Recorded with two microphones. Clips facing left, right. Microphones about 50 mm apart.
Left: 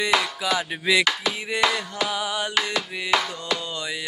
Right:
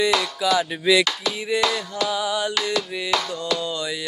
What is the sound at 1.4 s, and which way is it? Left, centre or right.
Music, left.